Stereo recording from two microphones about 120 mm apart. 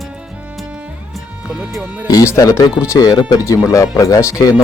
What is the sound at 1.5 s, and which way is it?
Music, 5° right (ahead or behind).